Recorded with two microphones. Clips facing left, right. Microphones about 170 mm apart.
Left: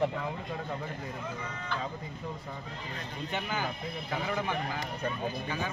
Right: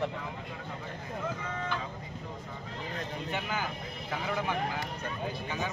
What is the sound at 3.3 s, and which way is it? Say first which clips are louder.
Speech: left 1 dB; 5° right (ahead or behind).